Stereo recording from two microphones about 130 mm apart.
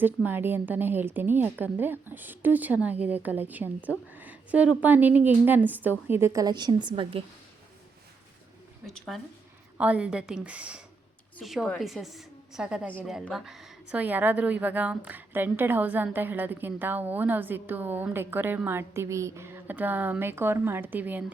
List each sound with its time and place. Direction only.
0.0 s a woman's voice: 15° right (ahead or behind); by 7.2 s 40° right (ahead or behind)
8.9 s a woman's voice: centre (ahead or behind)
9.7 s a woman's voice: 10° right (ahead or behind)
14.0 s a woman's voice: 15° right (ahead or behind)